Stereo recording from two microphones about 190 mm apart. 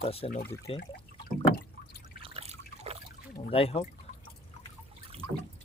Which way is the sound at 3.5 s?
30° left (ahead or behind).